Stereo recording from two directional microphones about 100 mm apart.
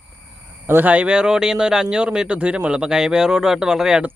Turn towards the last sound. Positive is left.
turn(degrees=-5)  # may be behind; listen again after turning